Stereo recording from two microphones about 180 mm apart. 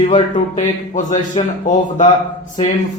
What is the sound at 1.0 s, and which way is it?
A man's voice, 45° left (ahead or behind).